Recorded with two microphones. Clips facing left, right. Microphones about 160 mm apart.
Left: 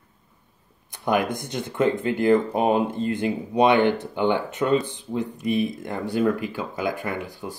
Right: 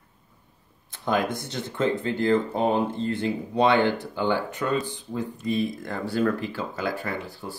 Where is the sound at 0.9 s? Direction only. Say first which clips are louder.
Left 2 dB; 15° left (ahead or behind).